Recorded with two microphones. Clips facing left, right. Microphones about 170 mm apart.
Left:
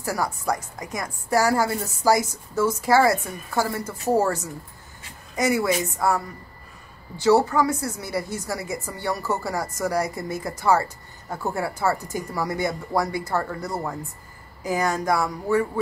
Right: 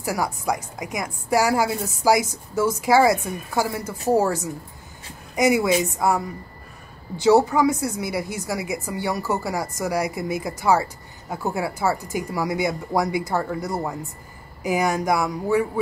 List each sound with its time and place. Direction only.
0.0 s a woman's voice: 10° right (ahead or behind)